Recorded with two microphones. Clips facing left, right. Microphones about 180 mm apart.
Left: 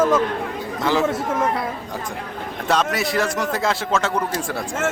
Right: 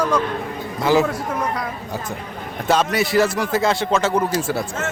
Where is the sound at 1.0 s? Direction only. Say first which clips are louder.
Left 2 dB; 25° left (ahead or behind).